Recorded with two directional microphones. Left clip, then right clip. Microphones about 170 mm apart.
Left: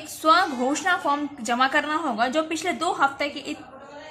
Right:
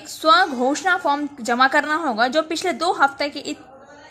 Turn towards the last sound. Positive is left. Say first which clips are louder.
# right 4 dB
turn(degrees=-30)  # may be behind; listen again after turning